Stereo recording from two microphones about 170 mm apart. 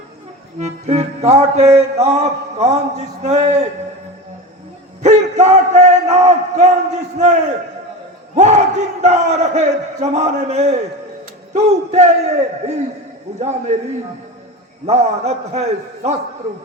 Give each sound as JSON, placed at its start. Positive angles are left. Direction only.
{"t": 0.6, "sound": "music", "side_deg": -40}
{"t": 3.2, "sound": "battle cry", "side_deg": -40}
{"t": 5.0, "sound": "speech", "side_deg": -45}
{"t": 8.4, "sound": "battle cry", "side_deg": -45}
{"t": 13.4, "sound": "music", "side_deg": -40}